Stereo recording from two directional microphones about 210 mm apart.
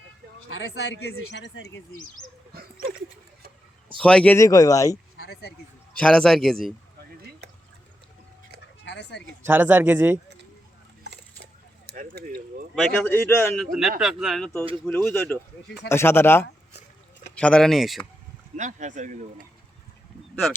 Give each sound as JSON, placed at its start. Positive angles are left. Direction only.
{"t": 0.4, "sound": "speech", "side_deg": 70}
{"t": 4.0, "sound": "speech", "side_deg": 5}
{"t": 5.1, "sound": "a sound", "side_deg": 50}
{"t": 6.0, "sound": "a man's voice", "side_deg": 5}
{"t": 7.4, "sound": "water", "side_deg": -55}
{"t": 8.8, "sound": "a sound", "side_deg": 55}
{"t": 9.4, "sound": "speech", "side_deg": -10}
{"t": 11.9, "sound": "a sound", "side_deg": -45}
{"t": 12.7, "sound": "a man's voice", "side_deg": 5}
{"t": 18.5, "sound": "speech", "side_deg": -35}